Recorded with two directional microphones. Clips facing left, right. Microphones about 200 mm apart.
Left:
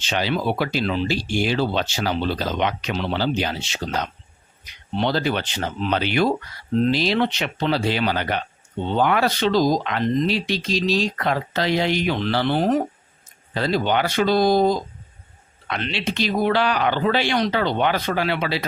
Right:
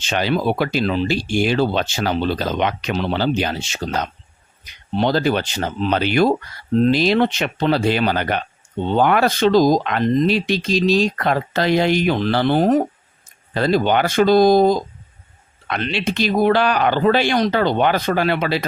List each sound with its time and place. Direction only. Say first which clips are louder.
0.0 s speech: right 3 dB; 50° right (ahead or behind)